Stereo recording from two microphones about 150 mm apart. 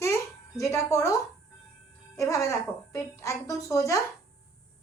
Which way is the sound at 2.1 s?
20° left (ahead or behind).